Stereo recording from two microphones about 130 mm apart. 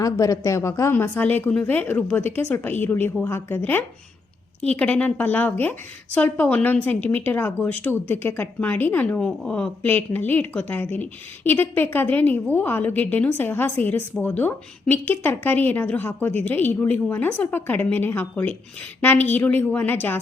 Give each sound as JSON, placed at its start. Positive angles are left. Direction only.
{"t": 0.0, "sound": "a woman's voice", "side_deg": 25}